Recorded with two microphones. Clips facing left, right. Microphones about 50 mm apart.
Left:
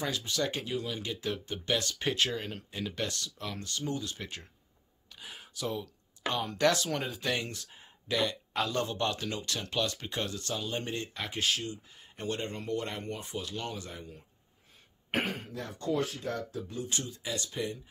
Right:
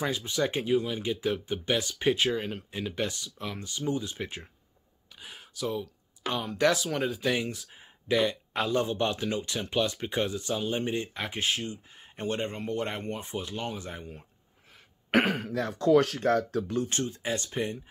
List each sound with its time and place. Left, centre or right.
0.0 s speech: centre
5.1 s speech: centre; by 14.2 s right
14.7 s speech: right
16.9 s speech: right